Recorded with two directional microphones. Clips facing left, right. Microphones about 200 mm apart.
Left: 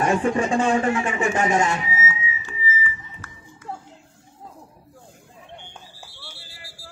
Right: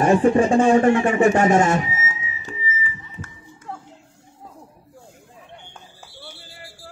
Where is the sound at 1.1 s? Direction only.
50° right (ahead or behind).